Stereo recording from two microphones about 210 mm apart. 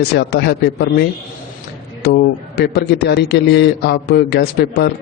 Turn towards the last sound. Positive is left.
turn(degrees=50)  # may be behind; listen again after turning